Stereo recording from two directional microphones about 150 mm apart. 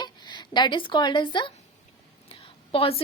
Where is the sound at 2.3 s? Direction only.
40° left (ahead or behind).